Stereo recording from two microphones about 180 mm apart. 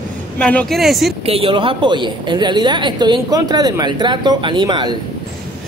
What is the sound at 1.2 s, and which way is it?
A woman's voice, 30° right (ahead or behind).